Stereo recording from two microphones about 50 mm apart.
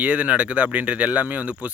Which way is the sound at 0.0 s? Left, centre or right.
Right.